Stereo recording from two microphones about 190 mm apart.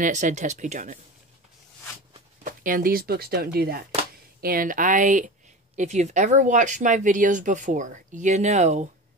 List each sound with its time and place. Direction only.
0.0 s speech: 40° right (ahead or behind)
2.4 s speech: 45° right (ahead or behind)